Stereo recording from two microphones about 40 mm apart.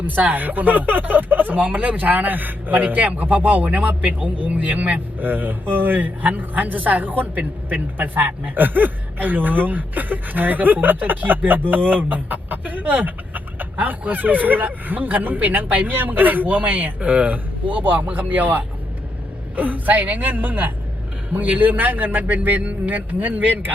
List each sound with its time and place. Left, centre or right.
0.0 s speech: right